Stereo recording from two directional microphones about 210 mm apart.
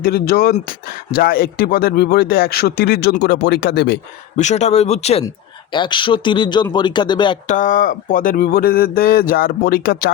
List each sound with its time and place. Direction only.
0.0 s speech: 45° left (ahead or behind)
4.4 s speech: 35° left (ahead or behind)
7.4 s speech: 35° left (ahead or behind)